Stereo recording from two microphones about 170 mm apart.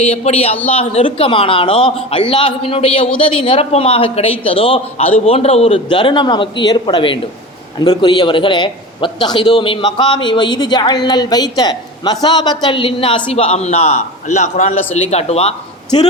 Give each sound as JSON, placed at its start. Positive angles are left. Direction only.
{"t": 0.0, "sound": "a woman's voice", "side_deg": 35}